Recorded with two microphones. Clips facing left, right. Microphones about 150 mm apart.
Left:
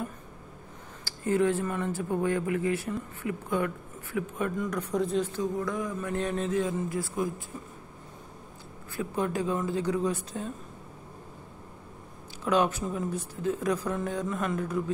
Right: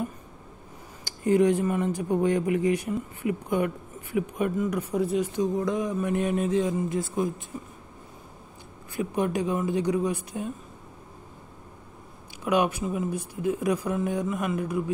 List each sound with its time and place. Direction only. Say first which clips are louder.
1.0 s speech: right 4 dB; 15° right (ahead or behind)
8.9 s speech: right 3 dB; 15° right (ahead or behind)
12.4 s speech: right 1 dB; 10° right (ahead or behind)